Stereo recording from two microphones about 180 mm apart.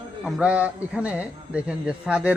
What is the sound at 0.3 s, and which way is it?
Speech, 5° right (ahead or behind).